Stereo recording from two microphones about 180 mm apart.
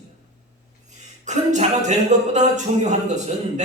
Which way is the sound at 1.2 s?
40° right (ahead or behind).